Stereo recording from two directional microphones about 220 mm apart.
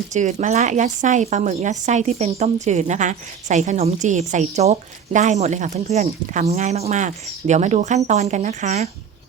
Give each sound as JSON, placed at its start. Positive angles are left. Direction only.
{"t": 0.1, "sound": "a woman's voice", "side_deg": -30}